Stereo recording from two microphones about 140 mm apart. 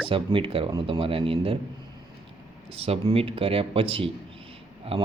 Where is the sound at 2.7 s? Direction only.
45° right (ahead or behind).